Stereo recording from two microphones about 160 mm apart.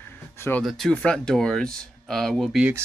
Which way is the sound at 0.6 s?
Centre (ahead or behind).